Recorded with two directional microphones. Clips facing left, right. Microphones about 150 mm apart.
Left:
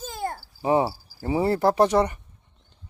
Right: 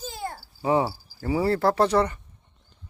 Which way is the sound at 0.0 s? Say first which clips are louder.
Left 3 dB; 50° left (ahead or behind).